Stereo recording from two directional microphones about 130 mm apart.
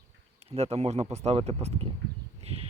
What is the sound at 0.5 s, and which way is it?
Speech, 55° right (ahead or behind).